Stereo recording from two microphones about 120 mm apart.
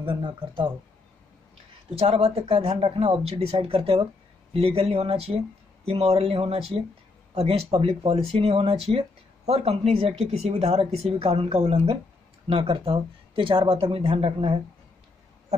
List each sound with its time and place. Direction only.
2.0 s a woman's voice: 55° right (ahead or behind)